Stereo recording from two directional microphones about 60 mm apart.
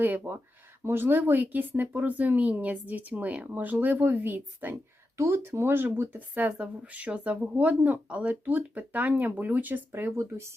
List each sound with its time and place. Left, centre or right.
0.0 s speech: right
9.9 s speech: right